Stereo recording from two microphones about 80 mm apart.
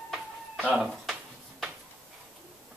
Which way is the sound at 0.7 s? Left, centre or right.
Centre.